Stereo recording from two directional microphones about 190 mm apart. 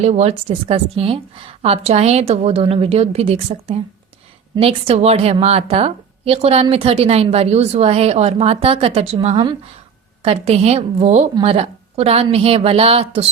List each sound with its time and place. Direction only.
0.0 s a woman's voice: 35° right (ahead or behind)